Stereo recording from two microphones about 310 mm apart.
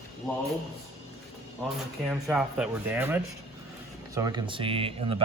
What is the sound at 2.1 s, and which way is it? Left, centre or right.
Speech, centre.